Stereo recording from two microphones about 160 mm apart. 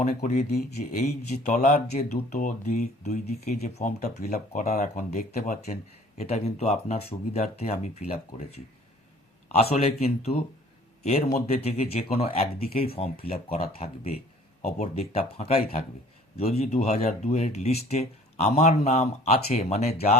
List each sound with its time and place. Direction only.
0.0 s speech: 45° left (ahead or behind)
11.4 s speech: 40° left (ahead or behind)